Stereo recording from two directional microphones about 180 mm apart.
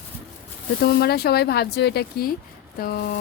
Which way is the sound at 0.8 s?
65° left (ahead or behind).